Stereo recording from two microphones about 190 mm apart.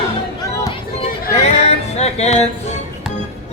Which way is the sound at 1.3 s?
35° left (ahead or behind).